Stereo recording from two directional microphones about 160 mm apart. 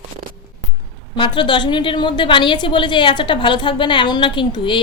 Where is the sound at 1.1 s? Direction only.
30° left (ahead or behind).